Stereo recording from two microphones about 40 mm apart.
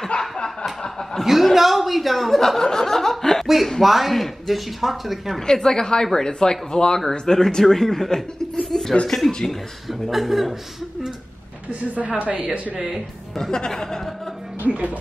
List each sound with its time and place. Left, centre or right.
0.2 s snicker: left
0.8 s chuckle: centre
1.2 s speech: centre
2.6 s chuckle: centre
3.8 s speech: centre
5.5 s speech: centre
8.6 s a sound: centre
9.0 s speech: centre
9.8 s speech: centre
12.2 s speech: right
12.7 s speech: centre
13.4 s speech: centre
14.6 s speech: right